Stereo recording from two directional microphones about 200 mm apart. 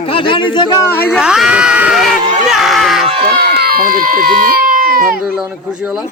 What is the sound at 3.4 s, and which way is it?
Speech, 50° right (ahead or behind).